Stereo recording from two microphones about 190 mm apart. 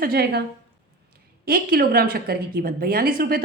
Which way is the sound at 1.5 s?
50° right (ahead or behind).